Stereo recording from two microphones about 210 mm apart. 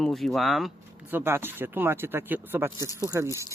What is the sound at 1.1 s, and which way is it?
Speech, 10° right (ahead or behind).